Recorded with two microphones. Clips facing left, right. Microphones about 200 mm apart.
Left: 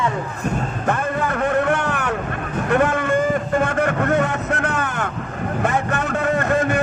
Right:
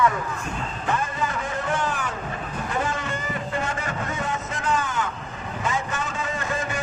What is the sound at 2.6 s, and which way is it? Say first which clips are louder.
Vehicle: left 10 dB; 60° left (ahead or behind).